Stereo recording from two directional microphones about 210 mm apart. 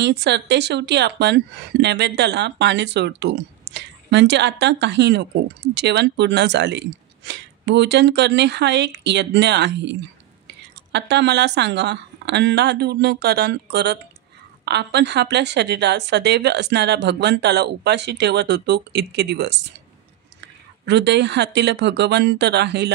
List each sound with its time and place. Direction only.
0.0 s a woman's voice: 55° right (ahead or behind)